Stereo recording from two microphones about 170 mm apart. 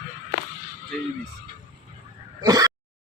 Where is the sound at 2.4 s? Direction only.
25° right (ahead or behind).